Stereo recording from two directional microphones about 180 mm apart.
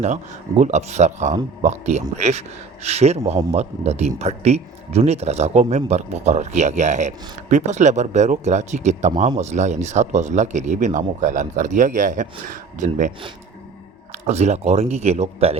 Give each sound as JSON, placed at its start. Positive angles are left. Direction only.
{"t": 0.0, "sound": "speech", "side_deg": -40}